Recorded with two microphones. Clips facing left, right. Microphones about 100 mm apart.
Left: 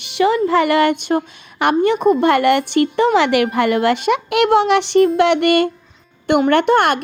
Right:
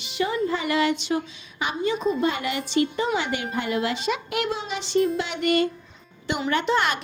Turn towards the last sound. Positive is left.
turn(degrees=60)  # may be behind; listen again after turning